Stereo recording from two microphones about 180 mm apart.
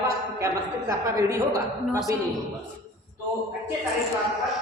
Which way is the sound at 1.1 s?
15° right (ahead or behind).